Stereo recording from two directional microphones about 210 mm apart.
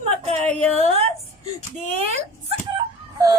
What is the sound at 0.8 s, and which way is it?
Speech, 30° right (ahead or behind).